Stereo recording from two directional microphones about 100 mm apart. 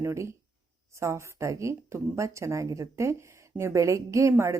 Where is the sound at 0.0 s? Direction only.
30° right (ahead or behind).